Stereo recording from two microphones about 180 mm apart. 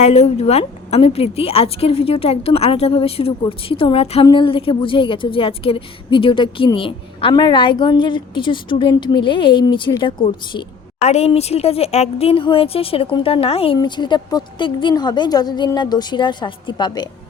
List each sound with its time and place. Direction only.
0.0 s a woman's voice: 35° left (ahead or behind)
11.0 s a woman's voice: 35° left (ahead or behind)